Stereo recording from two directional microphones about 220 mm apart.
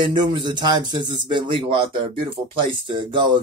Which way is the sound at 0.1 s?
20° right (ahead or behind).